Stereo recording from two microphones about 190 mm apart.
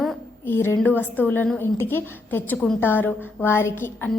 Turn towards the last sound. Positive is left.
turn(degrees=10)  # may be behind; listen again after turning